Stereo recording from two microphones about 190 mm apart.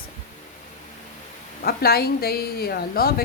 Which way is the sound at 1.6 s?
55° left (ahead or behind).